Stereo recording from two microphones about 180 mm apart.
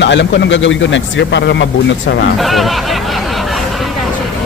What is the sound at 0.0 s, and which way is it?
Speech, 80° left.